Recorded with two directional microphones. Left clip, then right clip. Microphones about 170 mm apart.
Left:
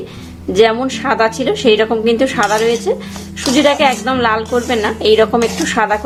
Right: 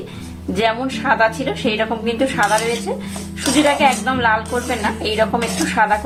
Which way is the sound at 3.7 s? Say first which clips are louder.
Left 3 dB; 45° left (ahead or behind).